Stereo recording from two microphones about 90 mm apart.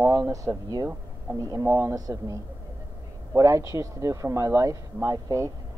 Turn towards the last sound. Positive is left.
turn(degrees=-35)  # may be behind; listen again after turning